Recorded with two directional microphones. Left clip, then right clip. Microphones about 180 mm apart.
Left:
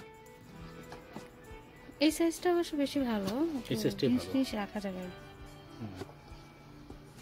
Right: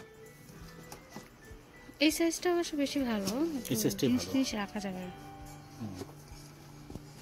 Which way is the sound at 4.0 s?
Centre (ahead or behind).